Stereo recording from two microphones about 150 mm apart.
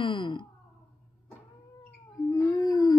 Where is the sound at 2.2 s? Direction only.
20° left (ahead or behind).